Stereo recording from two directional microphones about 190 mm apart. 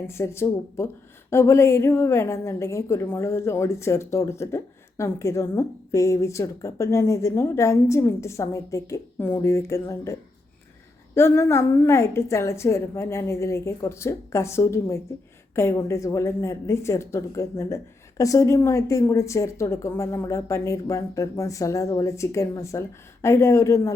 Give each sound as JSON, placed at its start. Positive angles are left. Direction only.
{"t": 0.1, "sound": "a woman's voice", "side_deg": 15}